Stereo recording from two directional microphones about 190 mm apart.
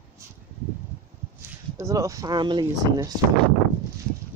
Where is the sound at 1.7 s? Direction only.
15° right (ahead or behind).